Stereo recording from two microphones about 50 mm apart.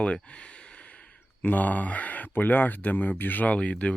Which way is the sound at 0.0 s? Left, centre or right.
Left.